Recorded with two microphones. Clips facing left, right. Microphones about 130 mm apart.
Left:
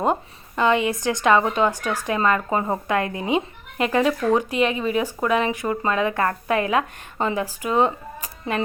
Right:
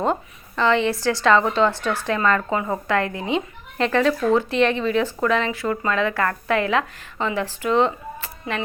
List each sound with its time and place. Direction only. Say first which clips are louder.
0.0 s speech: left 1 dB; 15° left (ahead or behind)
2.5 s speech: left 1 dB; 30° left (ahead or behind)
2.8 s speech: even; 20° left (ahead or behind)